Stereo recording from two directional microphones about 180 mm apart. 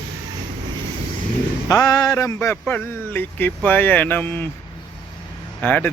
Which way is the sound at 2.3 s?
10° left (ahead or behind).